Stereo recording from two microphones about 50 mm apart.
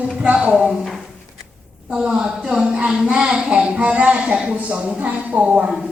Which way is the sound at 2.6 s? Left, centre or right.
Centre.